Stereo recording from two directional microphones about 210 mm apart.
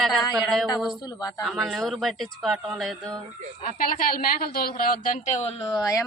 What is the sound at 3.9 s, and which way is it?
A woman's voice, 45° left (ahead or behind).